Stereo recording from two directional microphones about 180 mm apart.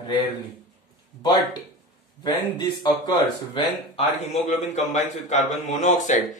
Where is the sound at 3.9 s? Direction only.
35° left (ahead or behind).